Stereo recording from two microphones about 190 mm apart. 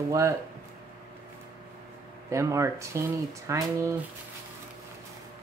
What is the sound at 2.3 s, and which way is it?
Speech, 15° right (ahead or behind).